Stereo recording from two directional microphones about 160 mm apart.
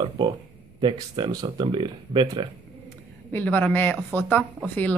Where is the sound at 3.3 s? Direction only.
10° left (ahead or behind).